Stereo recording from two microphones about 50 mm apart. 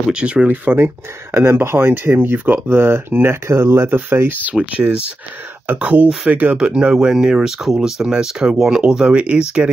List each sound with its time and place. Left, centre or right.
0.1 s speech: right
0.5 s speech: right
2.1 s speech: right
2.7 s speech: right
3.4 s speech: right
3.9 s speech: right
4.6 s speech: right
6.5 s speech: centre